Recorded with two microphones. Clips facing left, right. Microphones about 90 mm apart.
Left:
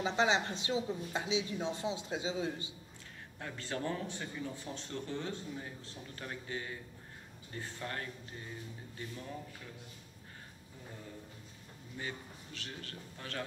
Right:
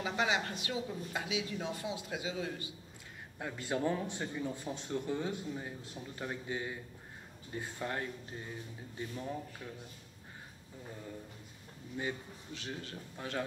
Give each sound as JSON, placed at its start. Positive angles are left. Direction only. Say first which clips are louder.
{"t": 0.0, "sound": "speech", "louder": "left 2 dB", "side_deg": 25}
{"t": 3.3, "sound": "a man's voice", "louder": "right 4 dB", "side_deg": -15}
{"t": 12.0, "sound": "a man's voice", "louder": "right 4 dB", "side_deg": -20}